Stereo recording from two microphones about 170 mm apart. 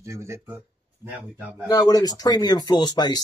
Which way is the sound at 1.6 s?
20° left (ahead or behind).